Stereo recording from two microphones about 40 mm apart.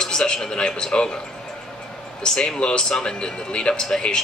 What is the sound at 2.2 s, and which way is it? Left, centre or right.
A man's voice, left.